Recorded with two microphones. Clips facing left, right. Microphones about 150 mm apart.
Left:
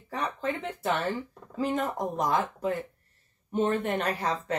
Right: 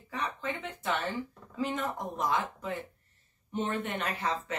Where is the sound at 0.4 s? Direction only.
40° left (ahead or behind).